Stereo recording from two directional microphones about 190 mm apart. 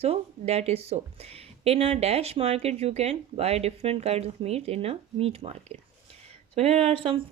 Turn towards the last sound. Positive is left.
turn(degrees=-30)  # may be behind; listen again after turning